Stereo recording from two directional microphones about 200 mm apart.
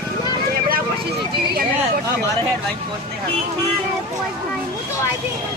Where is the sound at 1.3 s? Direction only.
50° right (ahead or behind).